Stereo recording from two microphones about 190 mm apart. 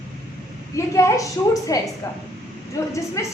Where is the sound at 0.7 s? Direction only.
15° left (ahead or behind).